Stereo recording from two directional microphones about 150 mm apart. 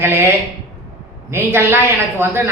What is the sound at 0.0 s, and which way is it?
Speech, 15° right (ahead or behind).